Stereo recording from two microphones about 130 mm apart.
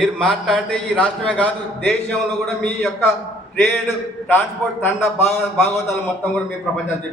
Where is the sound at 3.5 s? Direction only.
15° left (ahead or behind).